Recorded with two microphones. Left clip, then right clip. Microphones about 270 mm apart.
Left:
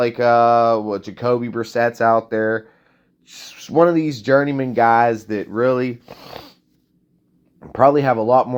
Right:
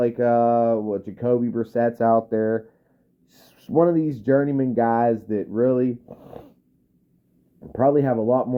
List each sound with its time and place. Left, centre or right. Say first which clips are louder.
0.0 s speech: left 5 dB; centre
2.0 s speech: left 2 dB; centre
3.2 s speech: left 4 dB; centre
5.9 s speech: left 2 dB; left
7.6 s speech: left 5 dB; centre